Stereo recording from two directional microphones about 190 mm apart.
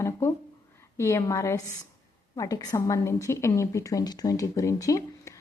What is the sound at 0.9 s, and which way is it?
A woman's voice, 15° left (ahead or behind).